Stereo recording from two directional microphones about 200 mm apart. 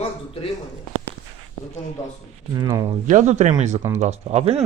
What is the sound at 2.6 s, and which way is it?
Speech, 20° right (ahead or behind).